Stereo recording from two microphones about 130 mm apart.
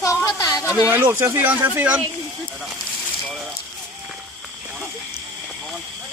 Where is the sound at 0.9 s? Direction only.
15° right (ahead or behind).